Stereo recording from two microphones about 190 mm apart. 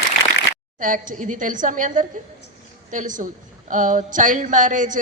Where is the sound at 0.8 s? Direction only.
45° right (ahead or behind).